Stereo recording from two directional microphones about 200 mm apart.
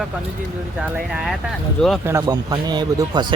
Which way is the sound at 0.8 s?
10° right (ahead or behind).